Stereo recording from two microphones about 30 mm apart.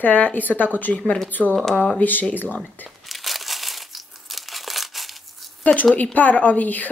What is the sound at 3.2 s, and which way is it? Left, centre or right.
Crumpling, centre.